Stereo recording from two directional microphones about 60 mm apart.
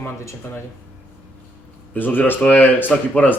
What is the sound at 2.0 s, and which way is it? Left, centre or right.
Speech, left.